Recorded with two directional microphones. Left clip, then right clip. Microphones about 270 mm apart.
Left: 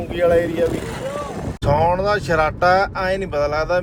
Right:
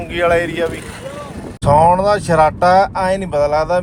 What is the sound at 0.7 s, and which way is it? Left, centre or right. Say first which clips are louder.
Vehicle: left 3 dB; left.